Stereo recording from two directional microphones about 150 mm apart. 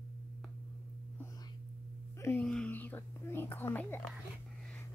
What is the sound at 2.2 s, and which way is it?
A woman's voice, 10° left (ahead or behind).